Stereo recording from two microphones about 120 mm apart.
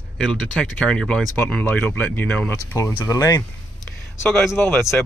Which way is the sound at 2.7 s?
30° left (ahead or behind).